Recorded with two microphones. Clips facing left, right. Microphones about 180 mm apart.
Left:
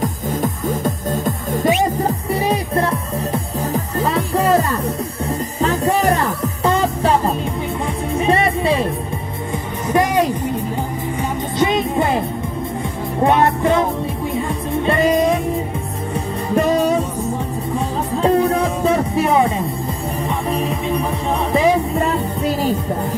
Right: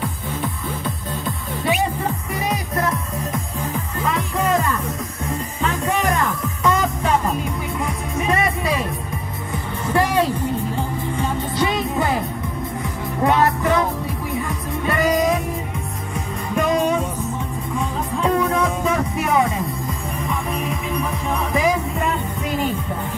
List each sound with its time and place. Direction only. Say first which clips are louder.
0.0 s music: left 6 dB; 45° left (ahead or behind)
9.8 s music: left 3 dB; 15° left (ahead or behind)
13.2 s music: left 3 dB; 25° left (ahead or behind)
16.5 s music: left 3 dB; 35° left (ahead or behind)